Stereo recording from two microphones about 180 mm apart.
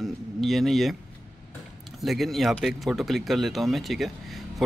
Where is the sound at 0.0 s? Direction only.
Centre (ahead or behind).